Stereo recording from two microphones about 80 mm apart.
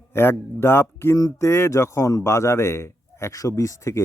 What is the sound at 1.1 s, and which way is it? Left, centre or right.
Speech, left.